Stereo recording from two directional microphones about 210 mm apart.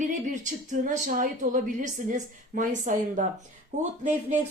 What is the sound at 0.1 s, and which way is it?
A woman's voice, 35° right (ahead or behind).